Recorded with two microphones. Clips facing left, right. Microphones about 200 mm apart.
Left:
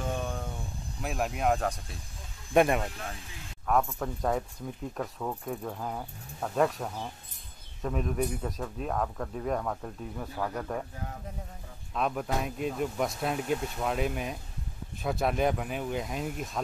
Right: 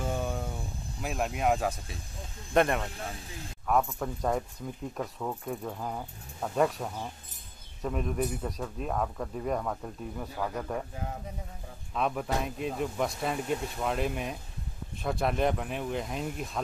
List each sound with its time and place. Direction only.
0.0 s vehicle: 5° right (ahead or behind)
1.0 s speech: centre (ahead or behind)
2.5 s speech: 10° left (ahead or behind)
11.9 s speech: centre (ahead or behind)